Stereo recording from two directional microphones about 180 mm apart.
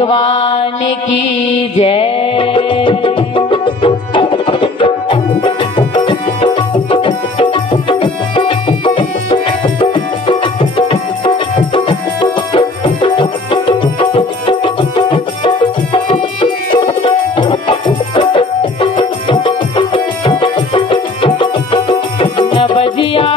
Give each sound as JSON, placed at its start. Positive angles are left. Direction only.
{"t": 0.0, "sound": "mantra", "side_deg": 30}
{"t": 1.8, "sound": "music", "side_deg": 30}